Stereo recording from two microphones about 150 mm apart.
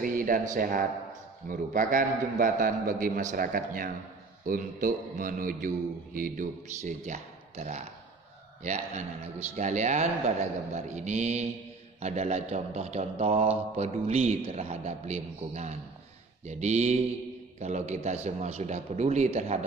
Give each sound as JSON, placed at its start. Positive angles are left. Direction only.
{"t": 0.0, "sound": "a man's voice", "side_deg": -65}
{"t": 6.8, "sound": "a man's voice", "side_deg": -50}